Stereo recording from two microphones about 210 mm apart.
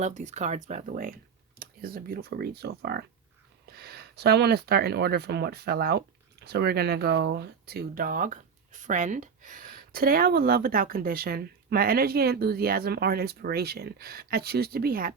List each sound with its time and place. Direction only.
0.0 s speech: 35° right (ahead or behind)